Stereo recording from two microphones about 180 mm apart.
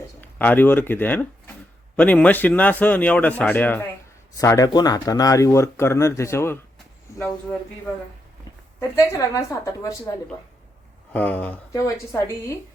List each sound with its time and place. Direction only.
0.2 s speech: 10° left (ahead or behind)
8.8 s speech: 15° left (ahead or behind)
11.1 s speech: 10° left (ahead or behind)